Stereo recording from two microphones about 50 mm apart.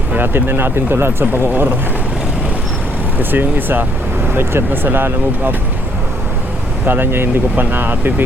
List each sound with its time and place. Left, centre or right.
0.2 s speech: right
3.2 s speech: right
6.8 s speech: right